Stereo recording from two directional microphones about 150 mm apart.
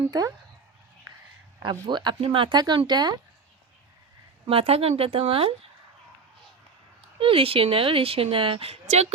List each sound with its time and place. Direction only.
0.1 s speech: 25° right (ahead or behind)
1.5 s speech: 30° right (ahead or behind)
4.4 s a woman's voice: 40° right (ahead or behind)
7.2 s a woman's voice: 40° right (ahead or behind)